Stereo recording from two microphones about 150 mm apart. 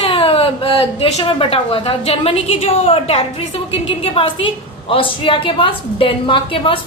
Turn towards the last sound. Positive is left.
turn(degrees=35)  # may be behind; listen again after turning